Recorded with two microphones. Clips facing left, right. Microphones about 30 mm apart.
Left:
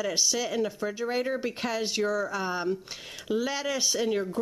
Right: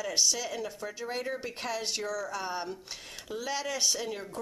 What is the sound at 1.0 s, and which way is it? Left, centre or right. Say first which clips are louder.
Speech: left 6 dB; centre.